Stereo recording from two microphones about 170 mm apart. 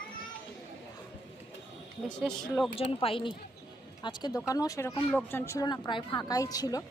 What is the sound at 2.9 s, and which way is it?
Speech, 35° left (ahead or behind).